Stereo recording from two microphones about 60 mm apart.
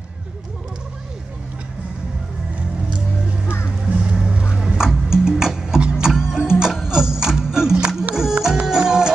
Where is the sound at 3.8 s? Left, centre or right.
Centre.